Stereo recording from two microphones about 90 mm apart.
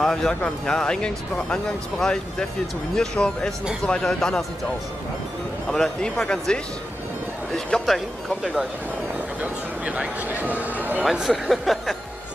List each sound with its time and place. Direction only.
0.0 s speech: 5° left (ahead or behind)
5.7 s speech: 5° left (ahead or behind)
9.4 s a man's voice: 15° right (ahead or behind)
11.1 s speech: centre (ahead or behind)